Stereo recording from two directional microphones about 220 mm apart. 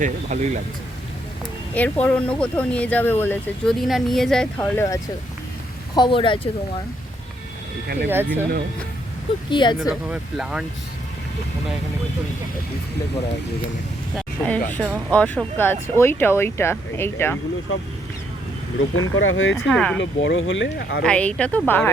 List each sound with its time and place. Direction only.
0.0 s speech: 35° right (ahead or behind)
1.7 s speech: 5° left (ahead or behind)
5.9 s speech: 20° left (ahead or behind)
8.0 s speech: 10° right (ahead or behind)
9.5 s speech: 20° left (ahead or behind)
9.9 s speech: centre (ahead or behind)
14.2 s vehicle: 5° left (ahead or behind)
14.7 s speech: 5° left (ahead or behind)
18.9 s speech: 65° left (ahead or behind)
19.6 s speech: 5° left (ahead or behind)
20.0 s speech: 55° left (ahead or behind)
21.0 s speech: 5° left (ahead or behind)